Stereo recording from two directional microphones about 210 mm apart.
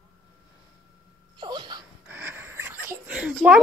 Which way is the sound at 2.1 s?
10° right (ahead or behind).